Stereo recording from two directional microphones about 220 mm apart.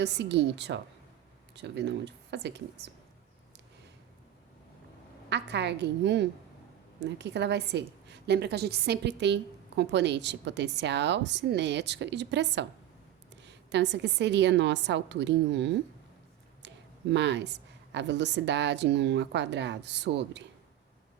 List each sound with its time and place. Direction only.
0.0 s a woman's voice: 50° right (ahead or behind)
5.3 s a woman's voice: 50° right (ahead or behind)